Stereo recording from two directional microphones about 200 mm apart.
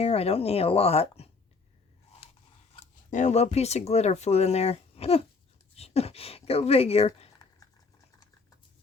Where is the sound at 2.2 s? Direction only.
30° left (ahead or behind).